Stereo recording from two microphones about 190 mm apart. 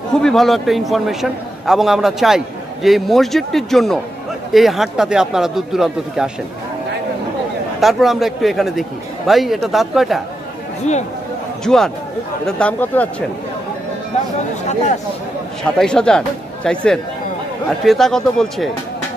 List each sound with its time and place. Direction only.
0.1 s a man's voice: centre (ahead or behind)
7.8 s a man's voice: centre (ahead or behind)
10.9 s speech: 35° left (ahead or behind)
11.6 s a man's voice: centre (ahead or behind)
15.8 s a man's voice: 5° left (ahead or behind)